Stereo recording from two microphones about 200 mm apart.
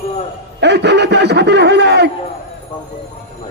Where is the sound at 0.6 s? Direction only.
60° right (ahead or behind).